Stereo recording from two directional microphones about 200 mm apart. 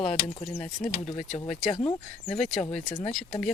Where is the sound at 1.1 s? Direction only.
35° left (ahead or behind).